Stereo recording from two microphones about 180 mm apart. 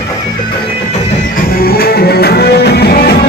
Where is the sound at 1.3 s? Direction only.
55° left (ahead or behind).